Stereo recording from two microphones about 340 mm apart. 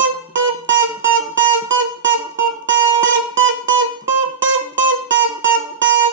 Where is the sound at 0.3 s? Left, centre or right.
Right.